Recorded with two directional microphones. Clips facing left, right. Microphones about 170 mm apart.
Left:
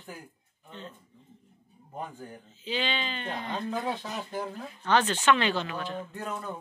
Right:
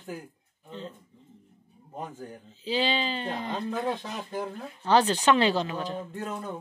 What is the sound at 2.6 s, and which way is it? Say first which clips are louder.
Speech: right 4 dB; 35° right (ahead or behind).